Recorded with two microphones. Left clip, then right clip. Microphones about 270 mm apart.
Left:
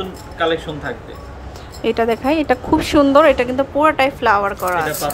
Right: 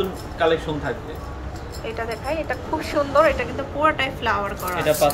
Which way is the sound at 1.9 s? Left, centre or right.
Left.